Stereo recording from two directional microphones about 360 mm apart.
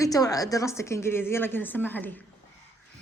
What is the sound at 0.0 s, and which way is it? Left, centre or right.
A woman's voice, centre.